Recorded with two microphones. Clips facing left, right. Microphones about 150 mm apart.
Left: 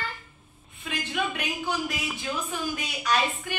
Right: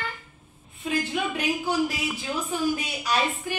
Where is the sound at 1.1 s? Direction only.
30° right (ahead or behind).